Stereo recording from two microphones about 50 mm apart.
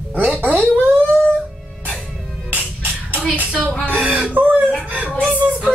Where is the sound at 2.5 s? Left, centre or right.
Right.